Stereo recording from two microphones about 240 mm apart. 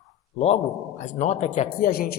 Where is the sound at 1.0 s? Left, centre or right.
Left.